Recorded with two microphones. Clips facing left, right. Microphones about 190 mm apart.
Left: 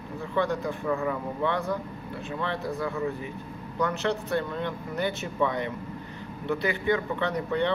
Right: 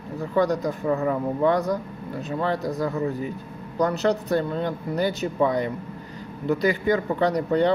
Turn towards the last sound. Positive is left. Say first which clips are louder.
# right 6 dB
turn(degrees=-40)  # may be behind; listen again after turning